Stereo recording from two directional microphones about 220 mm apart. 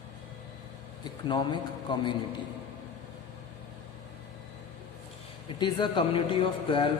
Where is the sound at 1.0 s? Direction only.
20° left (ahead or behind).